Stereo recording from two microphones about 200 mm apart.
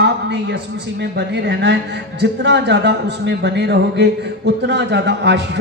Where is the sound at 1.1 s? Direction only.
55° right (ahead or behind).